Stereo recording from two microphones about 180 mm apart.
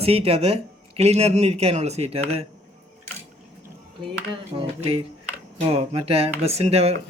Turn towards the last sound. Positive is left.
turn(degrees=-35)  # may be behind; listen again after turning